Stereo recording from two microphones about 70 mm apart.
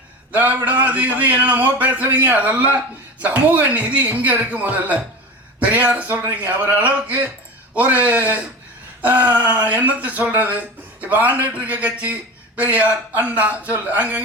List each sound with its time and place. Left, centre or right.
0.3 s a man's voice: right